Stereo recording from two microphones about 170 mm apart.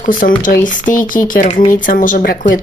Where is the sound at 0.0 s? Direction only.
55° left (ahead or behind).